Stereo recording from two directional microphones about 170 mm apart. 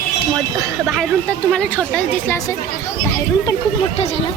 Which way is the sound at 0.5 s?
Centre (ahead or behind).